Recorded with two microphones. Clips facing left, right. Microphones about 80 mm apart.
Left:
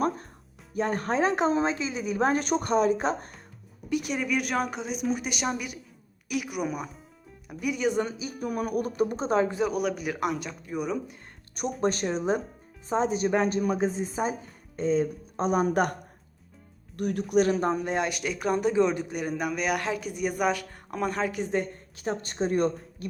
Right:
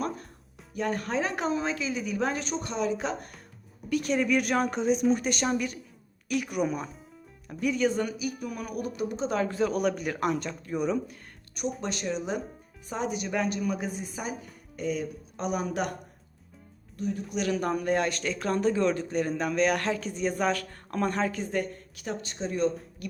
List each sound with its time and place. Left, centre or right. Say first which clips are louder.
0.7 s speech: left 2 dB; left
3.8 s a man's voice: right 2 dB; centre
8.4 s speech: left 6 dB; left
9.4 s a man's voice: right 1 dB; centre
9.7 s speech: right 1 dB; centre
11.8 s speech: left 5 dB; left
15.6 s speech: left 6 dB; left
17.0 s speech: left 3 dB; left
17.3 s speech: left 7 dB; left
17.6 s a man's voice: even; left; by 21.3 s centre
21.3 s speech: left 2 dB; left
23.0 s speech: left 3 dB; left